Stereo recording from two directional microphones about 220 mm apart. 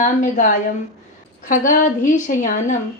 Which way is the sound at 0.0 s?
35° left (ahead or behind).